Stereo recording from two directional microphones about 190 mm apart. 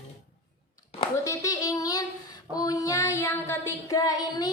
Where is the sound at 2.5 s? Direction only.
20° left (ahead or behind).